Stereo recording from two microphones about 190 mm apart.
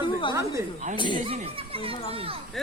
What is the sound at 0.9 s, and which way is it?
Speech, 25° left (ahead or behind).